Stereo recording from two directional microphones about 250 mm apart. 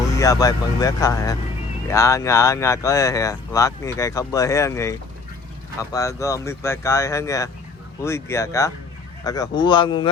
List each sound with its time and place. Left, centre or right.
0.2 s speech: centre